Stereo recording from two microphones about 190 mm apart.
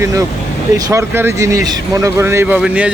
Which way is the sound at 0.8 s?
15° right (ahead or behind).